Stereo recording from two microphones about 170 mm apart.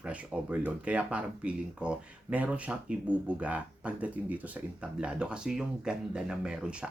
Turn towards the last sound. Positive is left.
turn(degrees=-5)  # may be behind; listen again after turning